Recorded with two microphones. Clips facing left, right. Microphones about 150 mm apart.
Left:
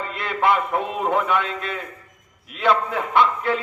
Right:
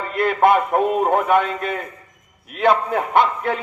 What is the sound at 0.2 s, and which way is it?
A man's voice, 50° right (ahead or behind).